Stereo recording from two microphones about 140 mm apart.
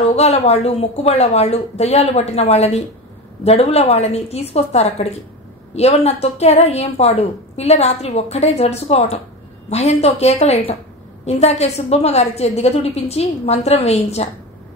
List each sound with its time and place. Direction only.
0.0 s a woman's voice: 50° left (ahead or behind)